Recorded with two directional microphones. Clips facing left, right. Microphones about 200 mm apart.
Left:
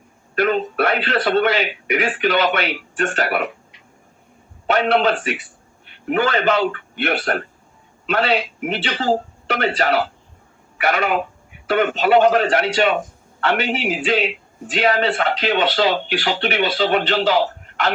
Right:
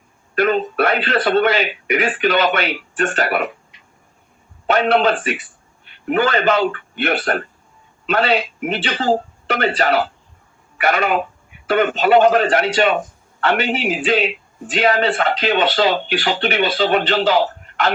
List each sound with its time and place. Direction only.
0.3 s a man's voice: 45° right (ahead or behind)
4.7 s a man's voice: 45° right (ahead or behind)